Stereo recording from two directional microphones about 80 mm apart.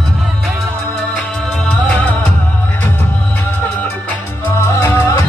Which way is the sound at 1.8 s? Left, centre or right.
Centre.